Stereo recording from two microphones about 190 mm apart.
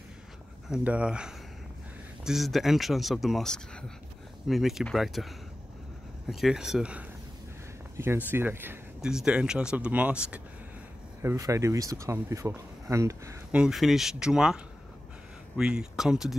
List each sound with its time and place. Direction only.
0.7 s speech: 5° right (ahead or behind)
6.4 s speech: centre (ahead or behind)
8.3 s speech: 10° right (ahead or behind)
13.6 s speech: centre (ahead or behind)